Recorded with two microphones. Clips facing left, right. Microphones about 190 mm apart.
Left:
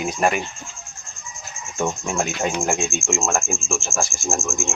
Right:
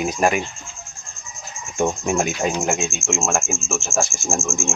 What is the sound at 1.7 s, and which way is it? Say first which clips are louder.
Cricket: right 3 dB; 10° right (ahead or behind).